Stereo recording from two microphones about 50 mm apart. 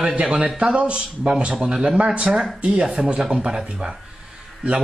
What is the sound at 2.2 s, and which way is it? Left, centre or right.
Speech, centre.